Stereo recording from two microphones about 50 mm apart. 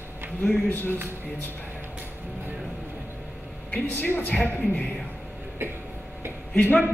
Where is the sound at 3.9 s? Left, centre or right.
Left.